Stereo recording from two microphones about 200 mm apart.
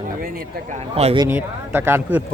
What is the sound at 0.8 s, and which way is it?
Speech, 30° right (ahead or behind).